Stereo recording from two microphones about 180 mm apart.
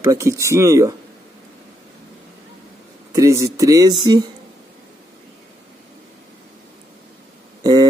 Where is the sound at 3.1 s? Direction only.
15° right (ahead or behind).